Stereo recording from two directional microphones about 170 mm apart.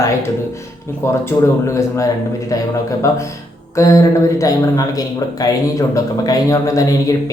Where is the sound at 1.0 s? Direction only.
15° left (ahead or behind).